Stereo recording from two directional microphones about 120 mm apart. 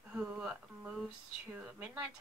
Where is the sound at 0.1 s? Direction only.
10° right (ahead or behind).